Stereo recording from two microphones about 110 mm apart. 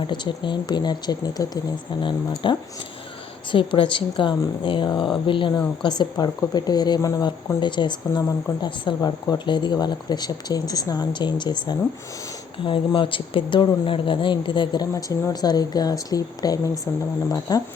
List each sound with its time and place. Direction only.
0.1 s speech: 45° left (ahead or behind)
2.0 s speech: 45° left (ahead or behind)